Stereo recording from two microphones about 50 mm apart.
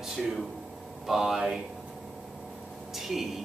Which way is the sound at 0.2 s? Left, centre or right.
Centre.